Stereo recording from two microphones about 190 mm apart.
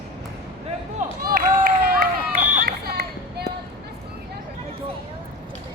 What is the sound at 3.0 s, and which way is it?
Child singing, 55° right (ahead or behind).